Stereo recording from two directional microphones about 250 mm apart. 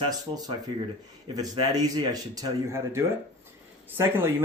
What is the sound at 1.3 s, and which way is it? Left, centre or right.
A man's voice, centre.